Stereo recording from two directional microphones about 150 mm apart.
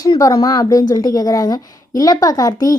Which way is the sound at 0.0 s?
25° left (ahead or behind).